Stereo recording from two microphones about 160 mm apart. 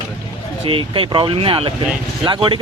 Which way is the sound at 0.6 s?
35° right (ahead or behind).